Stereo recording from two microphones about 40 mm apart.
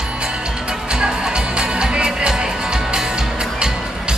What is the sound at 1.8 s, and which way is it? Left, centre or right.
Music, right.